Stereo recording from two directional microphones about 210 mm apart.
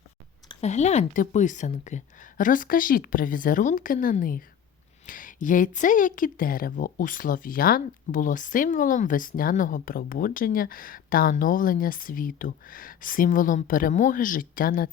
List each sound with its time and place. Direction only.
0.4 s a woman's voice: 30° left (ahead or behind)